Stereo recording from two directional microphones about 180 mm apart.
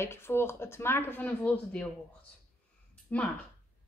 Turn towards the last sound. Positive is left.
turn(degrees=10)  # may be behind; listen again after turning